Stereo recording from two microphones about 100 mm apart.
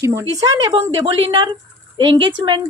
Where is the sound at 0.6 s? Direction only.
65° right (ahead or behind).